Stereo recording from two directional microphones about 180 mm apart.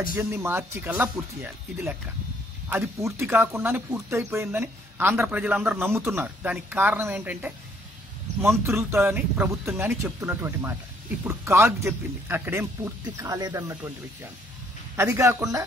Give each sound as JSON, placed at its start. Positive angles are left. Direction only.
{"t": 0.1, "sound": "speech", "side_deg": -10}
{"t": 15.0, "sound": "speech", "side_deg": -15}